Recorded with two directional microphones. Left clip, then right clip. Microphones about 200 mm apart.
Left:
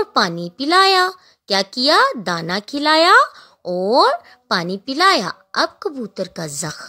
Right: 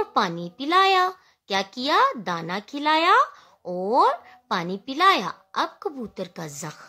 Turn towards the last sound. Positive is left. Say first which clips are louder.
# left 8 dB
turn(degrees=25)  # may be behind; listen again after turning